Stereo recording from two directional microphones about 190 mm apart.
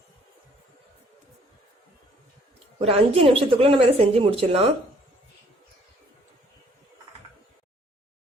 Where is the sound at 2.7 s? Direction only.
30° right (ahead or behind).